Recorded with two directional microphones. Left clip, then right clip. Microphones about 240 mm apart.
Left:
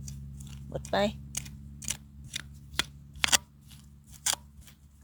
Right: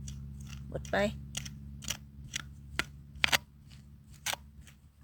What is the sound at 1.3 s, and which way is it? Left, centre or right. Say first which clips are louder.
Scissors: left 1 dB; centre.